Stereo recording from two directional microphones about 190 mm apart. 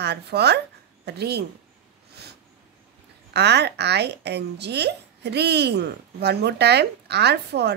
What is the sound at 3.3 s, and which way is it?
Speech, 60° right (ahead or behind).